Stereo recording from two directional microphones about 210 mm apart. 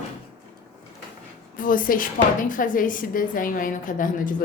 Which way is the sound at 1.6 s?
40° left (ahead or behind).